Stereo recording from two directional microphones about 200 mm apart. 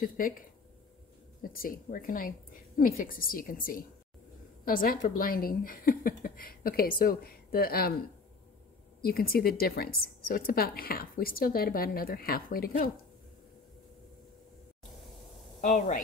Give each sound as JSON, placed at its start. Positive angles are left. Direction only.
{"t": 0.2, "sound": "a woman's voice", "side_deg": 45}
{"t": 1.4, "sound": "a woman's voice", "side_deg": 45}
{"t": 9.0, "sound": "a woman's voice", "side_deg": 50}
{"t": 15.6, "sound": "speech", "side_deg": 40}